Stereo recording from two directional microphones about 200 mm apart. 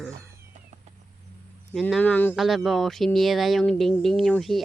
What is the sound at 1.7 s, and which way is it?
Speech, centre (ahead or behind).